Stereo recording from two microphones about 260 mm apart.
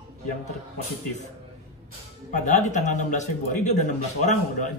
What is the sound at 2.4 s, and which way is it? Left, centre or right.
A man's voice, left.